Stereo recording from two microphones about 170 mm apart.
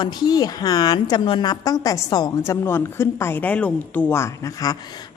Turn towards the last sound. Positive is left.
turn(degrees=20)  # may be behind; listen again after turning